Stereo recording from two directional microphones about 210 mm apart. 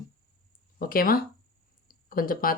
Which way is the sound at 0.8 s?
45° left (ahead or behind).